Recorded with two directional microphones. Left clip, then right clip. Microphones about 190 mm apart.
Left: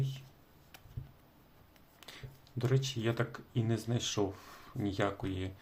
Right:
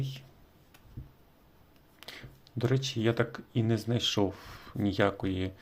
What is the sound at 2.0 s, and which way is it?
Speech, 25° right (ahead or behind).